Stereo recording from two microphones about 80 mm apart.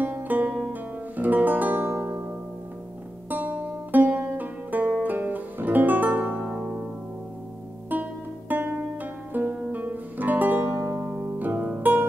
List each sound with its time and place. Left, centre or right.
0.0 s music: right
0.5 s music: centre
1.1 s music: right
3.3 s music: right
5.0 s guitar: right
7.9 s music: right
10.8 s music: right
11.1 s music: centre